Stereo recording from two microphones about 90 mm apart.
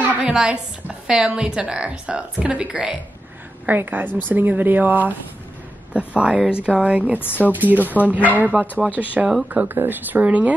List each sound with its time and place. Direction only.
0.2 s speech: 10° right (ahead or behind)
7.2 s speech: 20° left (ahead or behind)
7.5 s speech: 20° right (ahead or behind)